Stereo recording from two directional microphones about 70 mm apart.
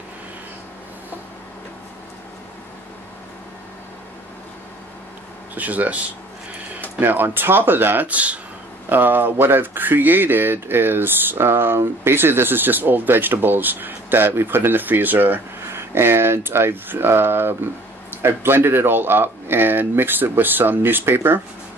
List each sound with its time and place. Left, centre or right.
5.5 s speech: right
7.0 s speech: right
15.6 s speech: right